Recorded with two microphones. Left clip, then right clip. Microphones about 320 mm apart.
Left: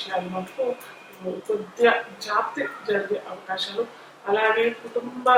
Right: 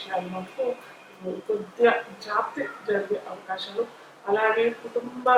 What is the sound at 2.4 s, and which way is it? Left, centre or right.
Speech, centre.